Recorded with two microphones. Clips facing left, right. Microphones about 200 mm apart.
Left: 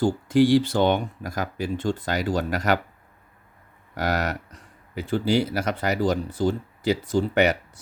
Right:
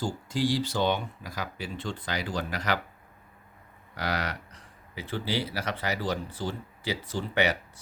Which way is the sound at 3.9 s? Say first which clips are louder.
Left 6 dB; 45° left (ahead or behind).